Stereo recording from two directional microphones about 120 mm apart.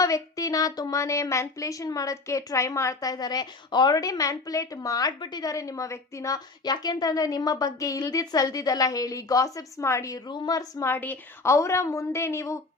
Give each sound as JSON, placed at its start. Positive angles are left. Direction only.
{"t": 0.0, "sound": "speech", "side_deg": 30}
{"t": 10.2, "sound": "speech", "side_deg": 35}